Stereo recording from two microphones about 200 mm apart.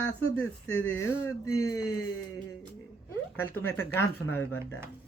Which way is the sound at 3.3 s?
10° left (ahead or behind).